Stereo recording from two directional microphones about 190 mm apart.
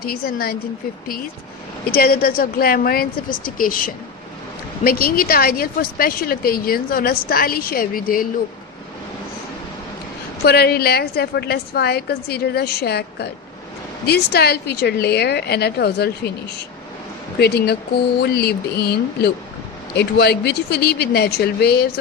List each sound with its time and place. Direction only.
0.0 s speech: 50° left (ahead or behind)
1.9 s speech: 50° left (ahead or behind)
10.4 s a woman's voice: 55° left (ahead or behind)